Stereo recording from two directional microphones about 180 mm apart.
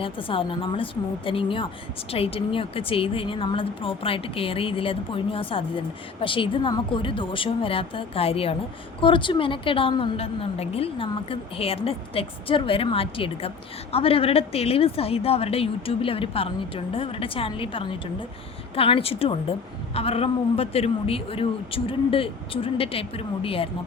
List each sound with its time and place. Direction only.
0.0 s a woman's voice: 30° left (ahead or behind)